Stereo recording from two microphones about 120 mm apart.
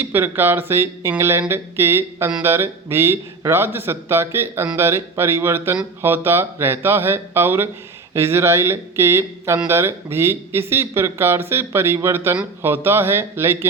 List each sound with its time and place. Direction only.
0.0 s speech: 15° right (ahead or behind)